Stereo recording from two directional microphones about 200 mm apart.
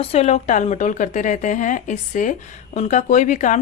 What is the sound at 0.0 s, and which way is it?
A woman's voice, 30° left (ahead or behind).